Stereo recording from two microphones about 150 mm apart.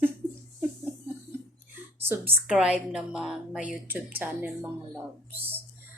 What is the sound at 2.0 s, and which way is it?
A woman's voice, 10° right (ahead or behind).